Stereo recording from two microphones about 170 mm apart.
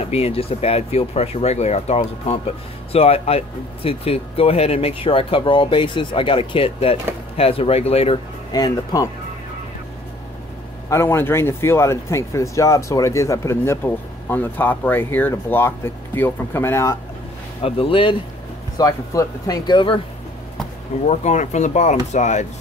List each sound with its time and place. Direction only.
0.0 s speech: 35° left (ahead or behind)
8.5 s speech: 20° left (ahead or behind)
10.9 s speech: 15° left (ahead or behind)
17.6 s speech: 35° left (ahead or behind)
18.8 s speech: 20° left (ahead or behind)
21.0 s speech: 45° left (ahead or behind)